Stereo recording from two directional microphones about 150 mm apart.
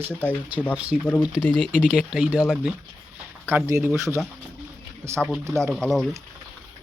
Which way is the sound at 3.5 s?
15° right (ahead or behind).